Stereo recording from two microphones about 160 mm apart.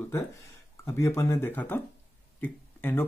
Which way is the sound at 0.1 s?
15° left (ahead or behind).